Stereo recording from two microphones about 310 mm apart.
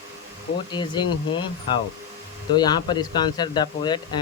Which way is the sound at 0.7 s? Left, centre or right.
Centre.